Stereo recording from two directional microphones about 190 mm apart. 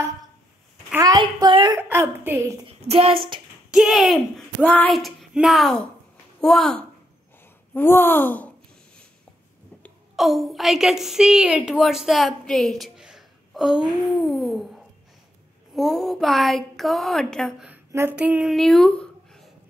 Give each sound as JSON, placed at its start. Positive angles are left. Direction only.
{"t": 0.9, "sound": "a sound", "side_deg": -20}
{"t": 1.8, "sound": "a woman's voice", "side_deg": -10}
{"t": 2.6, "sound": "a woman's voice", "side_deg": -30}
{"t": 3.7, "sound": "speech", "side_deg": 0}
{"t": 9.8, "sound": "a woman's voice", "side_deg": 0}